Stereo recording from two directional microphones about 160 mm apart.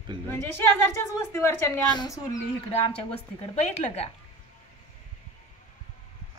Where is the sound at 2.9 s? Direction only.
40° left (ahead or behind).